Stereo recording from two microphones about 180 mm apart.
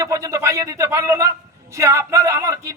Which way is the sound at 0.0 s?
20° right (ahead or behind).